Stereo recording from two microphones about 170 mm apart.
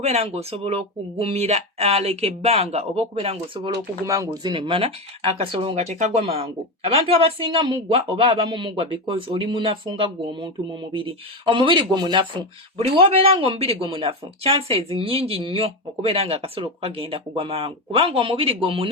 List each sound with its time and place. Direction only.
0.0 s speech: 40° right (ahead or behind)
4.0 s speech: 20° right (ahead or behind)